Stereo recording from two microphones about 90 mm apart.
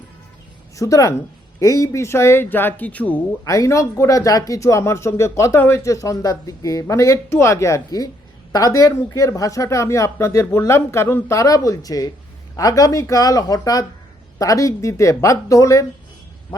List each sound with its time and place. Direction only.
0.8 s speech: 40° left (ahead or behind); by 3.2 s 15° left (ahead or behind)
3.4 s speech: 35° left (ahead or behind)